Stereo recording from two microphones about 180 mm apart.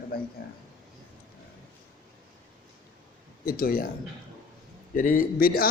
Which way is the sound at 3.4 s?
55° left (ahead or behind).